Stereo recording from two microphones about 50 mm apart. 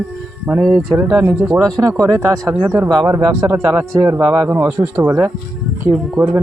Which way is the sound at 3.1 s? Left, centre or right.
Right.